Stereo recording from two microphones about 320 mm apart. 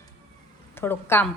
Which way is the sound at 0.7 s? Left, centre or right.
Centre.